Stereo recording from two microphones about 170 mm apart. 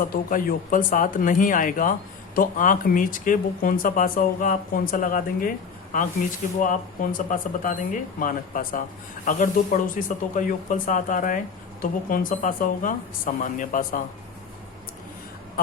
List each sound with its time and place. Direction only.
0.1 s speech: 55° left (ahead or behind)